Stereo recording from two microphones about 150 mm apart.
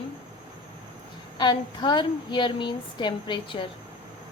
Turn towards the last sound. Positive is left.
turn(degrees=35)  # may be behind; listen again after turning